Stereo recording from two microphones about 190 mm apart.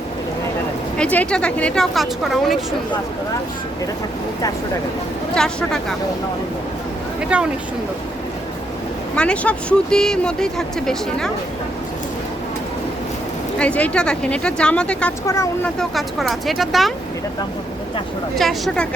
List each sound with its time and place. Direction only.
0.9 s speech: 5° left (ahead or behind)
5.3 s speech: 5° left (ahead or behind)
7.3 s speech: 5° right (ahead or behind)
9.1 s speech: 5° left (ahead or behind)
13.6 s speech: 5° left (ahead or behind)
15.8 s speech: centre (ahead or behind)
18.3 s speech: centre (ahead or behind)